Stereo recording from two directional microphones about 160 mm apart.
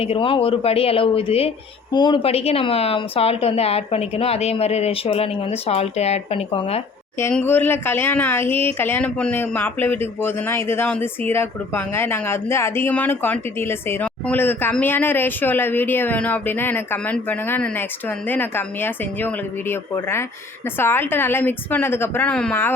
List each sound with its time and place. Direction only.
0.0 s speech: 35° left (ahead or behind)
1.9 s speech: 25° left (ahead or behind)
7.2 s speech: 15° left (ahead or behind)